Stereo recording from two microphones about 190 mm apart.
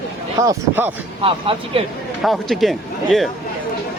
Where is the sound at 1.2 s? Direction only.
30° right (ahead or behind).